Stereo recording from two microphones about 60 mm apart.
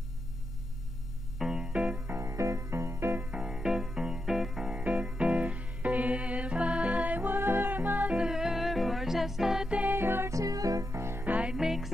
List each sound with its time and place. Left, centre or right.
1.4 s music: centre
2.0 s music: right
3.2 s music: right
8.1 s music: centre
9.8 s music: right
10.3 s music: right
10.9 s music: right
11.2 s music: right
11.5 s music: centre